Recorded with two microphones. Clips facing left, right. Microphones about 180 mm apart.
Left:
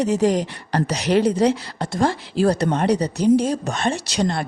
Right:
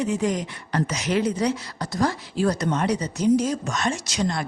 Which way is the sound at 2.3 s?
90° left.